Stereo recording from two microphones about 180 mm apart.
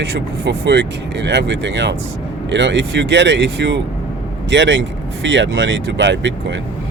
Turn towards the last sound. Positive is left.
turn(degrees=-80)